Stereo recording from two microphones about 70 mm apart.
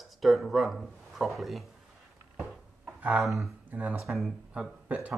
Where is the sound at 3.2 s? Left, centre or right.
Centre.